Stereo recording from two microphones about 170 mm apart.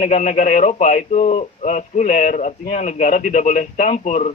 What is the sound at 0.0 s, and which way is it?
Speech, 50° left (ahead or behind).